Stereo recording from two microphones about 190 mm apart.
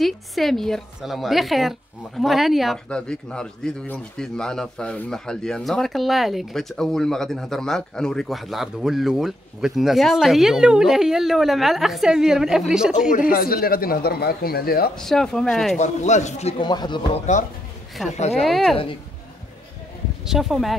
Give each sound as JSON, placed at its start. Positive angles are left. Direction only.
{"t": 0.0, "sound": "a woman's voice", "side_deg": 0}
{"t": 13.1, "sound": "speech", "side_deg": 50}
{"t": 15.0, "sound": "a woman's voice", "side_deg": 5}
{"t": 15.8, "sound": "speech", "side_deg": 40}
{"t": 18.0, "sound": "a woman's voice", "side_deg": 0}
{"t": 20.2, "sound": "a woman's voice", "side_deg": 0}